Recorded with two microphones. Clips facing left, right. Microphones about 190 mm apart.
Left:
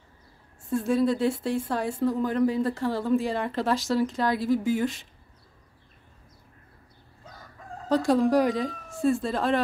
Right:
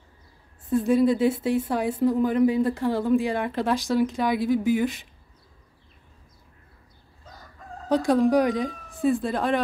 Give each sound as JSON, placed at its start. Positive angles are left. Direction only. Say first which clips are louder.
{"t": 0.7, "sound": "speech", "louder": "right 4 dB", "side_deg": 0}
{"t": 2.0, "sound": "a woman's voice", "louder": "right 4 dB", "side_deg": -15}
{"t": 2.2, "sound": "speech", "louder": "right 3 dB", "side_deg": -5}
{"t": 7.9, "sound": "speech", "louder": "right 2 dB", "side_deg": 0}